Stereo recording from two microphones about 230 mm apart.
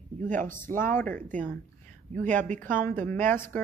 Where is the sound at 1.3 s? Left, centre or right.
Right.